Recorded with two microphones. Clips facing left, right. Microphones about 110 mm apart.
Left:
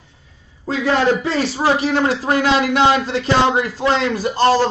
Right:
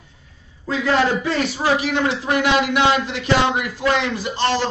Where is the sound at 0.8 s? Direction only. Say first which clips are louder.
Left 2 dB; 30° left (ahead or behind).